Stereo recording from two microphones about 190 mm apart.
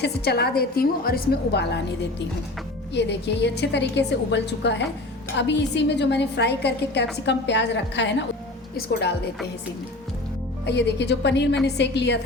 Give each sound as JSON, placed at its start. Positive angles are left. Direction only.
{"t": 0.0, "sound": "a woman's voice", "side_deg": 60}
{"t": 10.7, "sound": "a woman's voice", "side_deg": 65}